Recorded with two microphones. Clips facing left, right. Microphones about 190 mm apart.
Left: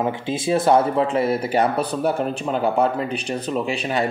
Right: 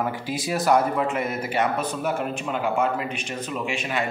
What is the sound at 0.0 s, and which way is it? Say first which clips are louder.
A man's voice: left 4 dB; 25° left (ahead or behind).